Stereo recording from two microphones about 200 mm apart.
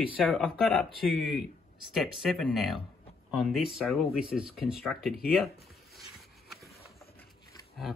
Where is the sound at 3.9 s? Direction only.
5° right (ahead or behind).